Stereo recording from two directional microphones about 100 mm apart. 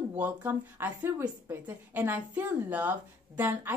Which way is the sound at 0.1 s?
20° right (ahead or behind).